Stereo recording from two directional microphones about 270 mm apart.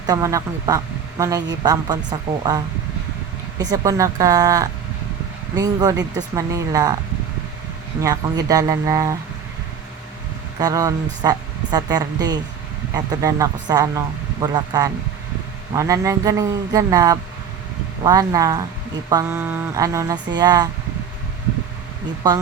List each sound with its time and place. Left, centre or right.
0.1 s speech: centre
3.6 s speech: centre
8.0 s speech: centre
10.6 s speech: centre